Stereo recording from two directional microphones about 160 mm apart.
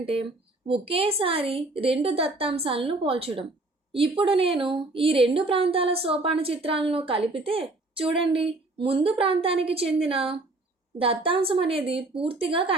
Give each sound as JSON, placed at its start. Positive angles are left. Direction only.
{"t": 0.0, "sound": "a woman's voice", "side_deg": -35}